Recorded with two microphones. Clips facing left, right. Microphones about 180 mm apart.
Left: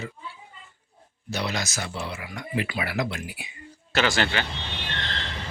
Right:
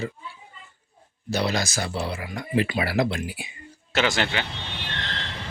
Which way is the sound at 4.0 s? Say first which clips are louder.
Even; 20° right (ahead or behind).